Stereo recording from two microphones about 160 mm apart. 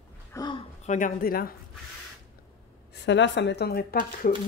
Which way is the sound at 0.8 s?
50° left (ahead or behind).